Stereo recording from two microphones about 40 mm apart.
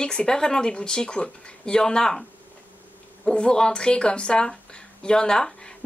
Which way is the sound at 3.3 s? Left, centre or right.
Left.